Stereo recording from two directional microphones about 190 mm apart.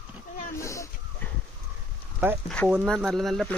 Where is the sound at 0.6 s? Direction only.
15° left (ahead or behind).